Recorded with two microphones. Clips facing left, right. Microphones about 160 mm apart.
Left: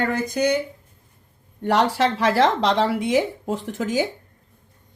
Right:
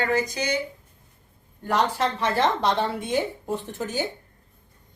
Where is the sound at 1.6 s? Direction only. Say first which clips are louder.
Left 4 dB; 75° left (ahead or behind).